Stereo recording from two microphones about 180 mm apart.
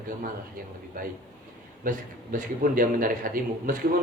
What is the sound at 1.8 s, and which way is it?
A man's voice, 45° right (ahead or behind).